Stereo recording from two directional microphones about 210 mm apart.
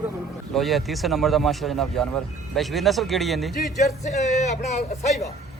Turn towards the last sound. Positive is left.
turn(degrees=30)  # may be behind; listen again after turning